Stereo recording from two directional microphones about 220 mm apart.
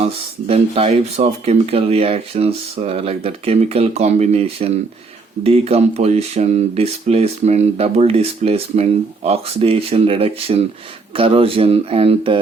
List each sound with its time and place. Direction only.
0.0 s speech: 25° right (ahead or behind)